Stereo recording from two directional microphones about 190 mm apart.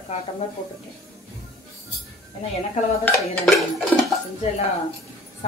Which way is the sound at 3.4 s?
Centre (ahead or behind).